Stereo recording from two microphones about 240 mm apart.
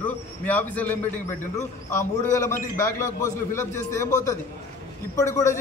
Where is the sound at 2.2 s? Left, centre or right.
Centre.